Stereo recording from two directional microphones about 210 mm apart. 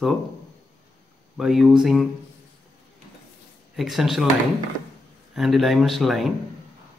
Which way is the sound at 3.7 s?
Centre (ahead or behind).